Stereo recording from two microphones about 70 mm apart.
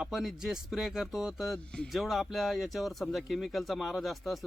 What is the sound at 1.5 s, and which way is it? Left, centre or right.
Speech, centre.